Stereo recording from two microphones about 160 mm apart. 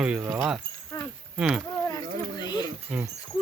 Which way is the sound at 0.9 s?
25° left (ahead or behind).